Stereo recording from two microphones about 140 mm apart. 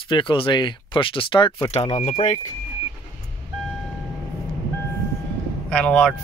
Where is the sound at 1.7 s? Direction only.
50° left (ahead or behind).